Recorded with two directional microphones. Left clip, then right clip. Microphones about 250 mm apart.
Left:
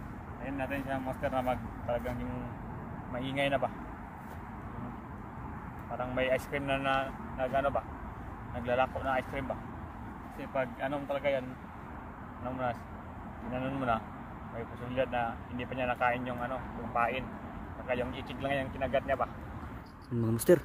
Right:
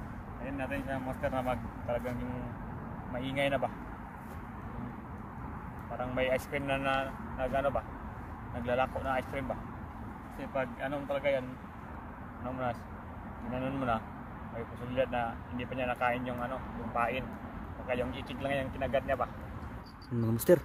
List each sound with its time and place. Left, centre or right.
0.5 s speech: centre
3.2 s speech: centre
5.9 s speech: centre
13.6 s speech: centre